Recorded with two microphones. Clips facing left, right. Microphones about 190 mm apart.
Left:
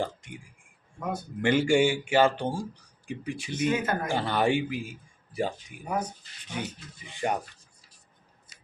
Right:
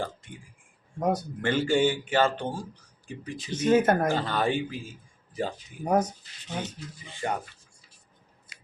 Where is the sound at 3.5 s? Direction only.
45° right (ahead or behind).